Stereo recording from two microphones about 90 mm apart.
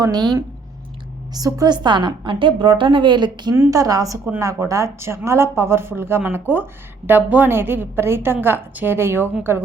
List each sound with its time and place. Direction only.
0.0 s a woman's voice: 50° right (ahead or behind)
1.6 s a woman's voice: 55° right (ahead or behind)
3.7 s a woman's voice: 40° right (ahead or behind); by 9.6 s 25° right (ahead or behind)